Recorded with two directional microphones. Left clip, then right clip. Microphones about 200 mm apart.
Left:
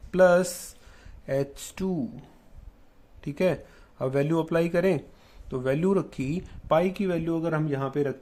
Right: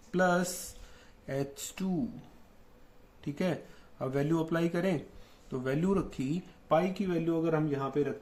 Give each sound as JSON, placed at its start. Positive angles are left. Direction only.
{"t": 0.1, "sound": "mantra", "side_deg": 45}
{"t": 1.3, "sound": "speech", "side_deg": 40}
{"t": 3.2, "sound": "a man's voice", "side_deg": 40}
{"t": 6.7, "sound": "speech", "side_deg": 55}